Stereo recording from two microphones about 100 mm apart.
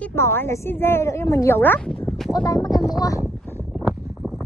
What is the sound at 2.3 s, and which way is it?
Speech, 40° left (ahead or behind).